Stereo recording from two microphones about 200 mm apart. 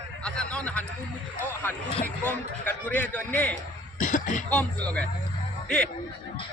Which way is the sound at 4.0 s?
40° left (ahead or behind).